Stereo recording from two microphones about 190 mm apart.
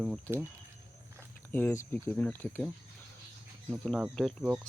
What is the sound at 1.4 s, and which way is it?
Speech, 10° left (ahead or behind).